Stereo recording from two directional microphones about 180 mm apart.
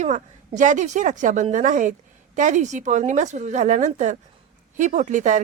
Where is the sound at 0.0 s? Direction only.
40° right (ahead or behind).